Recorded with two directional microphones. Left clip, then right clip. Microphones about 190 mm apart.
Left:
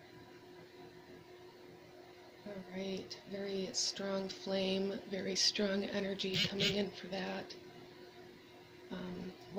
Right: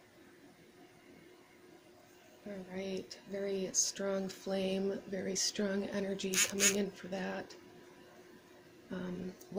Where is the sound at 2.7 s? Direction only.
45° right (ahead or behind).